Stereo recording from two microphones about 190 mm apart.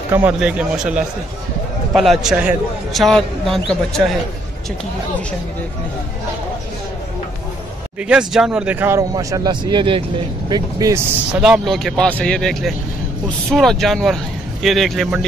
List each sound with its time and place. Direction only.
0.1 s a man's voice: 5° right (ahead or behind)
8.0 s speech: 5° right (ahead or behind)
11.4 s a man's voice: centre (ahead or behind)